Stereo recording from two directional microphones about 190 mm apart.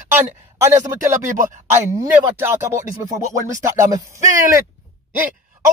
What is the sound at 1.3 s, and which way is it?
Speech, 45° right (ahead or behind).